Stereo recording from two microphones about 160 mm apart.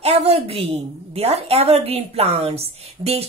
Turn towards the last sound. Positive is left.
turn(degrees=-40)  # may be behind; listen again after turning